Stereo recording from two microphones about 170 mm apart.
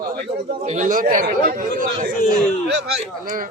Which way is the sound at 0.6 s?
45° right (ahead or behind).